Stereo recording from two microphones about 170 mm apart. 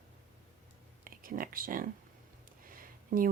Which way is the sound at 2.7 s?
55° right (ahead or behind).